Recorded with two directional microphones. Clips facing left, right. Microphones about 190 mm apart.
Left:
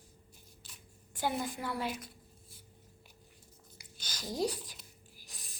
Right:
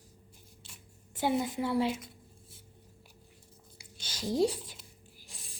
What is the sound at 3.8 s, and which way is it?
Whispering, 25° right (ahead or behind).